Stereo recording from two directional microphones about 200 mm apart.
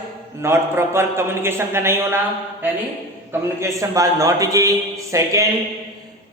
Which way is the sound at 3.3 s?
15° right (ahead or behind).